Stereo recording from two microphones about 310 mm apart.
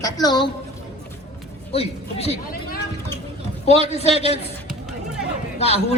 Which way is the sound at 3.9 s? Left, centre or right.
Centre.